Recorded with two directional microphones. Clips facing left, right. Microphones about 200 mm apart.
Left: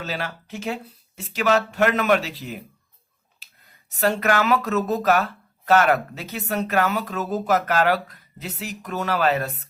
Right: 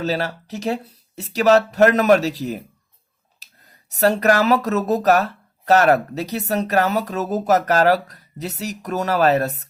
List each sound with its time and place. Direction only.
0.0 s speech: 40° right (ahead or behind)